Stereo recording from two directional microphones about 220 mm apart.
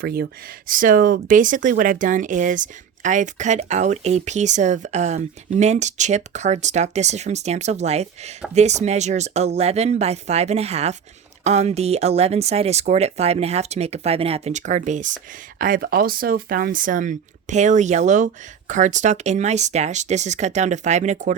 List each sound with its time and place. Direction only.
0.0 s speech: 45° right (ahead or behind)